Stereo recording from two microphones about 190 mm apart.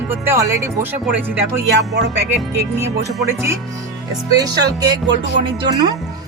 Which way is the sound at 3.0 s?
15° right (ahead or behind).